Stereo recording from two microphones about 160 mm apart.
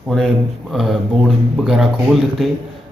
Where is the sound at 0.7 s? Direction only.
Centre (ahead or behind).